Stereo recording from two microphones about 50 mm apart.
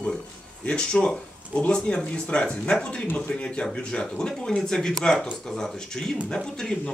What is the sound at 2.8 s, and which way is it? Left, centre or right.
Speech, left.